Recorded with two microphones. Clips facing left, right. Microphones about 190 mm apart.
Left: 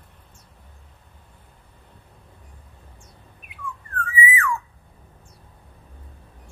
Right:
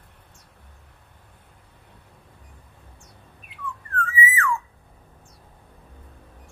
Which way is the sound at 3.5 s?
15° left (ahead or behind).